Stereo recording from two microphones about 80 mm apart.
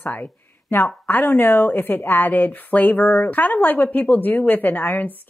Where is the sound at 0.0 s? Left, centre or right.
Left.